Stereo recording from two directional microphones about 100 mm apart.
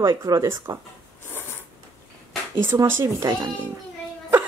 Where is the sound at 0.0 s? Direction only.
40° right (ahead or behind).